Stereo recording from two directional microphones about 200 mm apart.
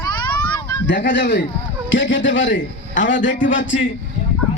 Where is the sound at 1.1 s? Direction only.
60° left (ahead or behind).